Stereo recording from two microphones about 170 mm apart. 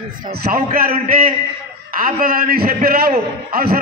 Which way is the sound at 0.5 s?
55° right (ahead or behind).